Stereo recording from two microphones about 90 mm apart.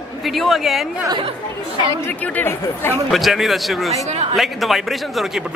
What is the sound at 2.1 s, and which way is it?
Speech, 25° left (ahead or behind).